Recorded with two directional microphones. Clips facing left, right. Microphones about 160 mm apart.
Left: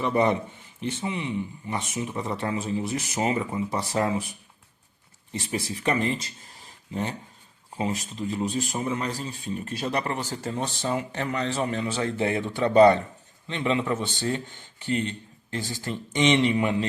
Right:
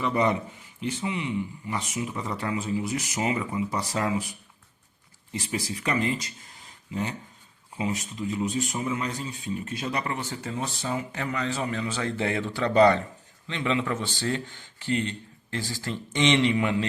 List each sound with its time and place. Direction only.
0.0 s a man's voice: 25° left (ahead or behind)
8.4 s speech: 35° left (ahead or behind)
11.7 s a man's voice: 25° left (ahead or behind)